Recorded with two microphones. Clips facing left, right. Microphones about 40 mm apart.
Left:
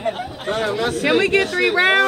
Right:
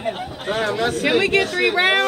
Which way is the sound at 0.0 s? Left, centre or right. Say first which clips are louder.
Left 2 dB; centre.